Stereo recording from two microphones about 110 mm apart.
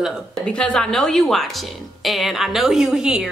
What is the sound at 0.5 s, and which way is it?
A woman's voice, 10° left (ahead or behind).